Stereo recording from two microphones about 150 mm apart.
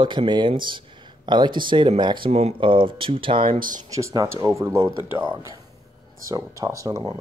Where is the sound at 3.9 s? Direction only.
20° right (ahead or behind).